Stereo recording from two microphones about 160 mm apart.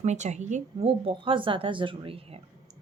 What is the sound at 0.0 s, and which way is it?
Speech, 45° right (ahead or behind).